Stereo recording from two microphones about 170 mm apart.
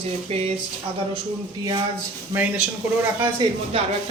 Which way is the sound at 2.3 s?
10° right (ahead or behind).